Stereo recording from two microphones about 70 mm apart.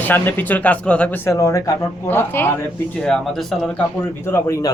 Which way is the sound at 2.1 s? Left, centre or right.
Left.